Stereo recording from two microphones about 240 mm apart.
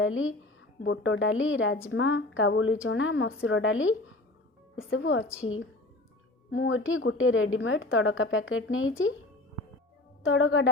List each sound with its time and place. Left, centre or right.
0.0 s a woman's voice: left
10.2 s a woman's voice: left